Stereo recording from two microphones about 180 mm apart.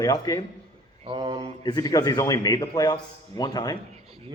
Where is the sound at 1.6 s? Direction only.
20° left (ahead or behind).